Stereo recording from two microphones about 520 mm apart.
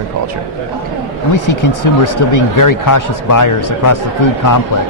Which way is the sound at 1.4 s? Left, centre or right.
Left.